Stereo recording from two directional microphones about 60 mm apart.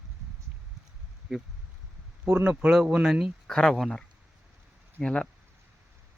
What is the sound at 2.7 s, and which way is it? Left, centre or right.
Speech, centre.